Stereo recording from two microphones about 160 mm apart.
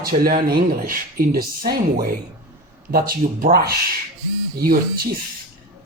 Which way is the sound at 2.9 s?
65° right (ahead or behind).